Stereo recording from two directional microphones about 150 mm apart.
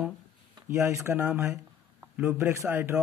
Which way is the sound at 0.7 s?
15° right (ahead or behind).